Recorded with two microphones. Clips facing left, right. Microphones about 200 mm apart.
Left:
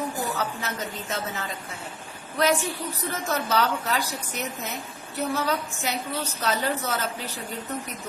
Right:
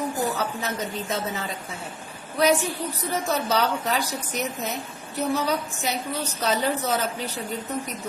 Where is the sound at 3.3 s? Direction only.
15° right (ahead or behind).